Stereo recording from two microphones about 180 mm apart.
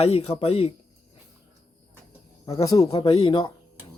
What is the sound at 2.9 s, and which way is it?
Speech, 30° left (ahead or behind).